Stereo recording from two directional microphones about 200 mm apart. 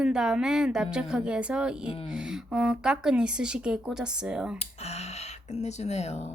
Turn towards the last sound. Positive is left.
turn(degrees=35)  # may be behind; listen again after turning